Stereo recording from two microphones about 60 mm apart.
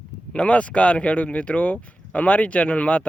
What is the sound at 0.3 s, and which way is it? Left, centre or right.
Speech, left.